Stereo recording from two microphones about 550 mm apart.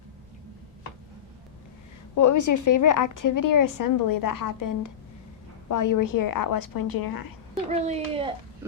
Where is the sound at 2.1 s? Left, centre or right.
Left.